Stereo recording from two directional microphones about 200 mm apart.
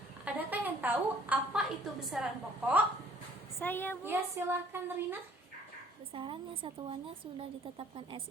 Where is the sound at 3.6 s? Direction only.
10° left (ahead or behind).